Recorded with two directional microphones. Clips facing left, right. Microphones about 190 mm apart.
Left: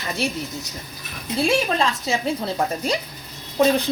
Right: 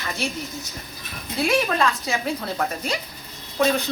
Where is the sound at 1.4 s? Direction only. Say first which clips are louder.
Even; 25° left (ahead or behind).